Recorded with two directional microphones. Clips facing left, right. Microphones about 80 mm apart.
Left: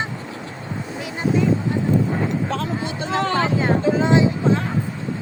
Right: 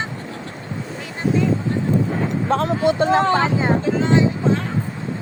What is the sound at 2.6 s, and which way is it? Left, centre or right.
Speech, right.